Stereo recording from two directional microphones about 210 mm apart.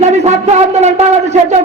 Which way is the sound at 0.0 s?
35° right (ahead or behind).